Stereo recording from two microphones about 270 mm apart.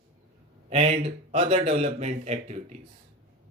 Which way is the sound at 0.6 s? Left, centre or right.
Right.